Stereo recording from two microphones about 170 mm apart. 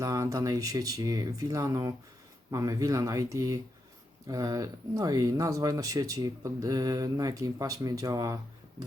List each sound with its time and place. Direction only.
0.0 s speech: 20° right (ahead or behind)